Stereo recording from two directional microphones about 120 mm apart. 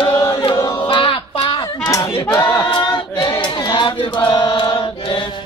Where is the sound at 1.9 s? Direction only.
30° left (ahead or behind).